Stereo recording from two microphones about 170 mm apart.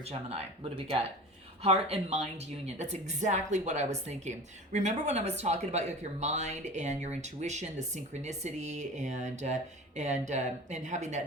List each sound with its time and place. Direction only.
0.0 s a woman's voice: 40° right (ahead or behind)